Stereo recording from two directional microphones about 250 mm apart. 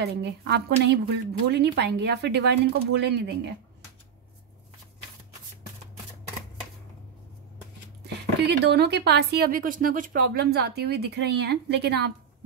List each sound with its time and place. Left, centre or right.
0.2 s a woman's voice: right
8.0 s speech: right